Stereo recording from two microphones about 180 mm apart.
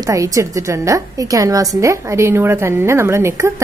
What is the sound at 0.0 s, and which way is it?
A woman's voice, 20° right (ahead or behind).